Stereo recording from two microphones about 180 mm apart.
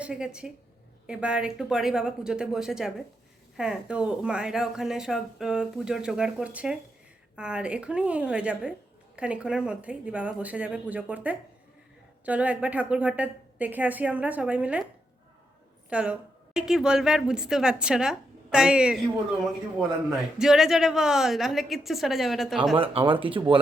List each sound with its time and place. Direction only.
0.0 s a woman's voice: 5° right (ahead or behind)
15.9 s a woman's voice: 5° right (ahead or behind)
20.4 s speech: 5° right (ahead or behind)
22.7 s speech: 30° right (ahead or behind)